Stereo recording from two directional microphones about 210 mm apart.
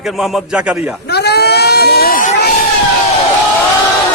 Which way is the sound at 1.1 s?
50° left (ahead or behind).